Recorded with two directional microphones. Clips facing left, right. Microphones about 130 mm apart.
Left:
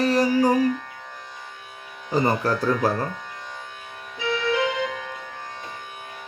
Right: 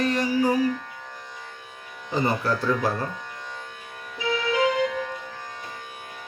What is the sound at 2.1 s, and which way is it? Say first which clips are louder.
Music: left 3 dB; 40° left (ahead or behind).